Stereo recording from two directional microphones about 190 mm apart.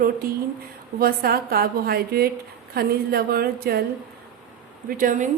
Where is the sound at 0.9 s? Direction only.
55° right (ahead or behind).